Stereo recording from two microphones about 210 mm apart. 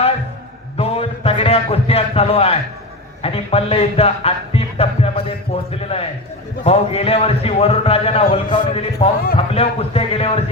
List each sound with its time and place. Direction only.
0.8 s a man's voice: 30° left (ahead or behind)